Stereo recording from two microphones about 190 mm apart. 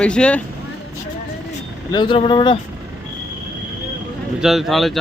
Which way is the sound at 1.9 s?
25° left (ahead or behind).